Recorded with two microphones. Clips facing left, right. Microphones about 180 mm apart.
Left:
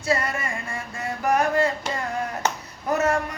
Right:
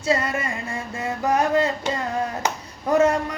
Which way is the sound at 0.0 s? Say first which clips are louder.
Right 2 dB; 25° right (ahead or behind).